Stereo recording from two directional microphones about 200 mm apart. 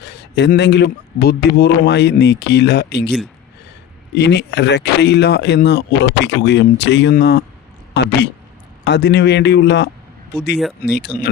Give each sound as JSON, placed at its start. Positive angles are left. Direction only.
{"t": 0.0, "sound": "speech", "side_deg": 60}